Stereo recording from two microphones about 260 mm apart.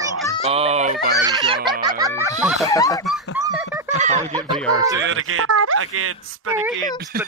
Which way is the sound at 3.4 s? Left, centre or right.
Centre.